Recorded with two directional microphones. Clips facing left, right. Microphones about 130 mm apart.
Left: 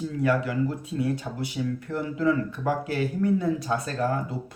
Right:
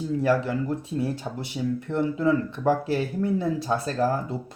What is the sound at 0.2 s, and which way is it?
Speech, 30° right (ahead or behind).